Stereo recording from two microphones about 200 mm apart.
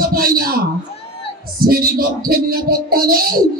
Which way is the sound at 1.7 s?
45° right (ahead or behind).